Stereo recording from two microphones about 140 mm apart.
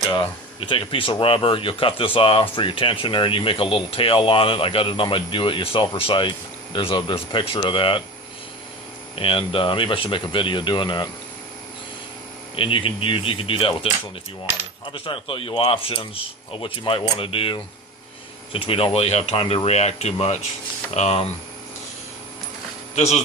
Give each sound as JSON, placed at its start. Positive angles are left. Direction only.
{"t": 0.6, "sound": "speech", "side_deg": 35}
{"t": 9.1, "sound": "speech", "side_deg": 40}
{"t": 12.5, "sound": "speech", "side_deg": 40}
{"t": 14.9, "sound": "speech", "side_deg": 40}
{"t": 23.0, "sound": "speech", "side_deg": 50}